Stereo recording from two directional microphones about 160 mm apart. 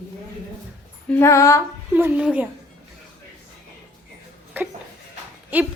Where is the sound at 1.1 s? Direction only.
15° left (ahead or behind).